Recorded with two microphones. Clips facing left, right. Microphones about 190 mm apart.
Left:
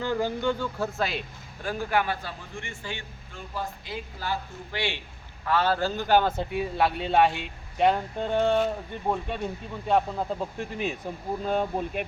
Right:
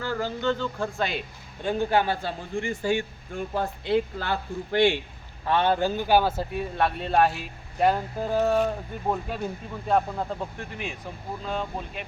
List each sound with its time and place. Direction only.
0.0 s speech: 15° left (ahead or behind)
1.6 s a man's voice: 25° right (ahead or behind); by 4.9 s 50° right (ahead or behind)
5.5 s speech: 25° right (ahead or behind); by 10.5 s 5° left (ahead or behind)
11.4 s speech: 50° left (ahead or behind)